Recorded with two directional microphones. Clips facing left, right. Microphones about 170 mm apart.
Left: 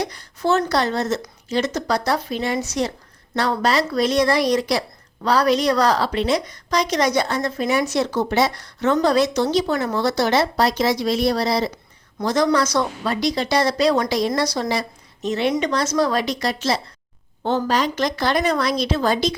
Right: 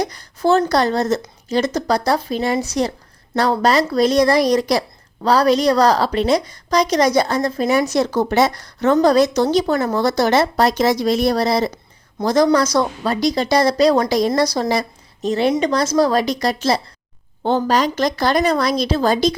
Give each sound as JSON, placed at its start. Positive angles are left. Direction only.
{"t": 0.0, "sound": "a woman's voice", "side_deg": -40}
{"t": 12.2, "sound": "a woman's voice", "side_deg": -35}